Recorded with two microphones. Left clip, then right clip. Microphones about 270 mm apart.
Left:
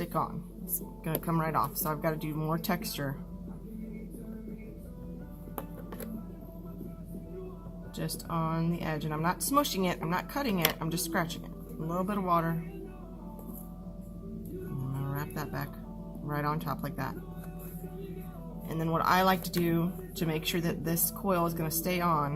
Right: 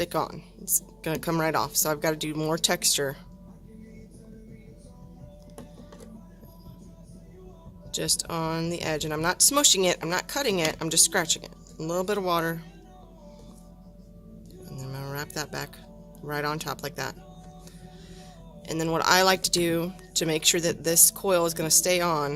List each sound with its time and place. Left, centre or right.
0.0 s speech: right
7.9 s speech: right
15.0 s music: right
16.2 s speech: right
18.7 s speech: right